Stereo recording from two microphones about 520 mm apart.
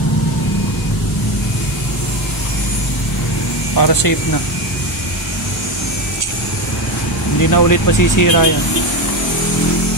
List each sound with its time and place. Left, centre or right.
3.7 s speech: left
7.4 s speech: left